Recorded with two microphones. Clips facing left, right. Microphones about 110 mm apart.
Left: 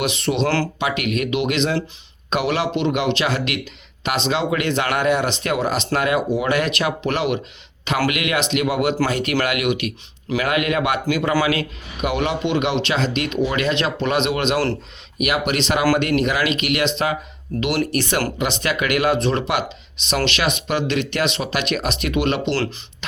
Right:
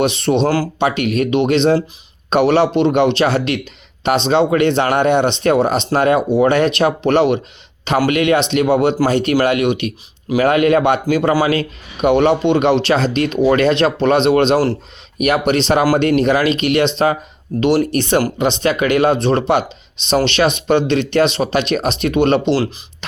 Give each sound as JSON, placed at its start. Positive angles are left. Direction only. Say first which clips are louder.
{"t": 0.0, "sound": "speech", "louder": "right 6 dB", "side_deg": -35}